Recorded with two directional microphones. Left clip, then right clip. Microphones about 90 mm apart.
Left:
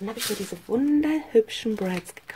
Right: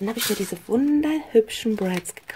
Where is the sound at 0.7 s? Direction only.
30° right (ahead or behind).